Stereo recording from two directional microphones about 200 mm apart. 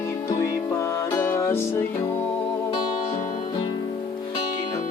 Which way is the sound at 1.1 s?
15° left (ahead or behind).